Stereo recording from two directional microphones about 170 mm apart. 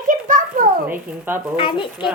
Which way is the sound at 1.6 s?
30° left (ahead or behind).